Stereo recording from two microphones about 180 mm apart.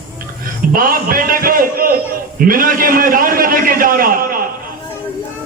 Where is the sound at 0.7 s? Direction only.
50° right (ahead or behind).